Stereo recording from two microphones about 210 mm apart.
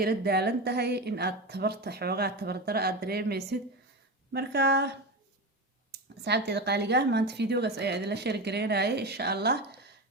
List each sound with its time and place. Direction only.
0.0 s a woman's voice: 50° right (ahead or behind)
6.2 s a woman's voice: 50° right (ahead or behind)